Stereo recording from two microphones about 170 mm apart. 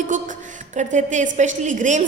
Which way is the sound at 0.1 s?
50° right (ahead or behind).